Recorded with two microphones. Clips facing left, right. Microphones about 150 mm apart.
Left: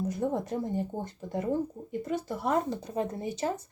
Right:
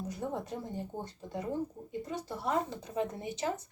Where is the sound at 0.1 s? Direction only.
50° left (ahead or behind).